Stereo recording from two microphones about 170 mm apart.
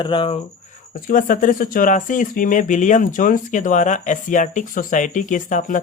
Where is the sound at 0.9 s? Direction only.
50° left (ahead or behind).